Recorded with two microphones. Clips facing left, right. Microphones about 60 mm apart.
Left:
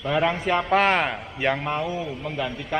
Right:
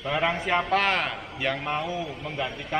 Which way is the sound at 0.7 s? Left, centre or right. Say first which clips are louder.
Left 4 dB; centre.